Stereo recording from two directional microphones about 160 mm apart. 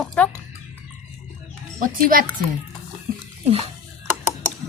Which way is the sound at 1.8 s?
60° right (ahead or behind).